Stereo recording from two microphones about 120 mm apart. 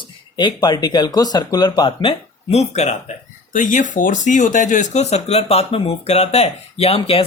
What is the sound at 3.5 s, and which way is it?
Speech, 90° left.